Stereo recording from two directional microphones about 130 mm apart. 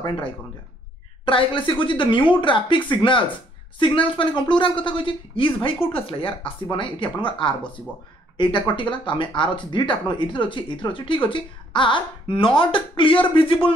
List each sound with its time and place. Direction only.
0.0 s speech: 40° left (ahead or behind)